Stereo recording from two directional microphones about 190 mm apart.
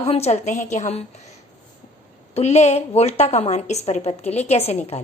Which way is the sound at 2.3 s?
35° left (ahead or behind).